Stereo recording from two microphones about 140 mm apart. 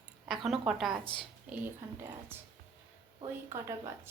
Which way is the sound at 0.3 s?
Centre (ahead or behind).